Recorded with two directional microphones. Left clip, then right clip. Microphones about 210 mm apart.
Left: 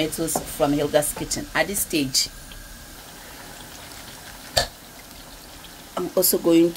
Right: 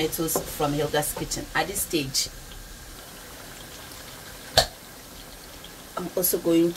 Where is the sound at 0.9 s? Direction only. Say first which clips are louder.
Left 5 dB; 55° left (ahead or behind).